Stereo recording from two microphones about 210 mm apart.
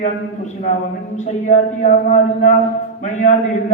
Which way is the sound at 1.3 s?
35° left (ahead or behind).